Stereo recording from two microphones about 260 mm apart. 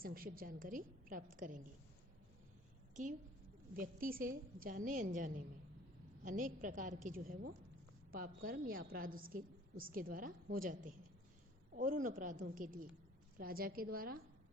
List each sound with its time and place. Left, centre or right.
0.0 s a woman's voice: right
2.9 s a woman's voice: right